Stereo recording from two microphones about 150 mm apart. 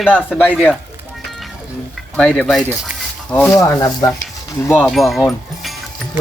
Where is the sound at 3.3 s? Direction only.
20° left (ahead or behind).